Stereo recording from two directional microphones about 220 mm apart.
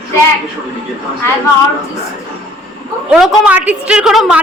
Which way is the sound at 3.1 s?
5° right (ahead or behind).